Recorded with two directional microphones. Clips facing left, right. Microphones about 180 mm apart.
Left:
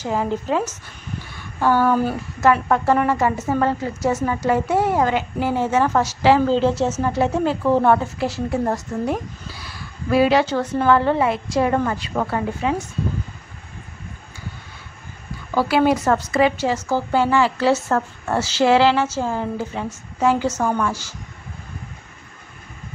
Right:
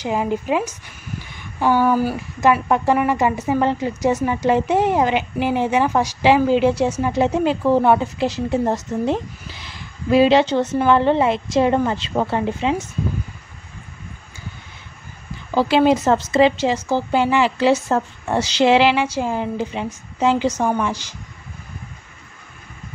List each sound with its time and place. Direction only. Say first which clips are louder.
0.0 s a woman's voice: right 1 dB; 15° right (ahead or behind)
1.3 s a sound: right 1 dB; 15° right (ahead or behind)
2.4 s a woman's voice: even; 15° right (ahead or behind)
15.5 s a woman's voice: right 2 dB; 20° right (ahead or behind)